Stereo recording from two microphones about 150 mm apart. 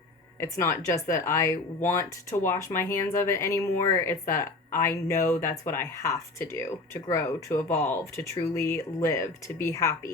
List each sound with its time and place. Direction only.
0.3 s speech: 20° left (ahead or behind)